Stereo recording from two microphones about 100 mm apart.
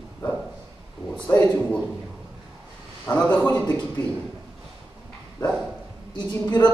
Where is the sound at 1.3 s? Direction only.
20° left (ahead or behind).